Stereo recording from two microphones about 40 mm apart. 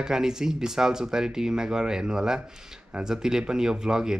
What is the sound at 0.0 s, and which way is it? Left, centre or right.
Speech, centre.